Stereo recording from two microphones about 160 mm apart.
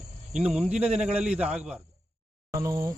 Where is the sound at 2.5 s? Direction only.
20° right (ahead or behind).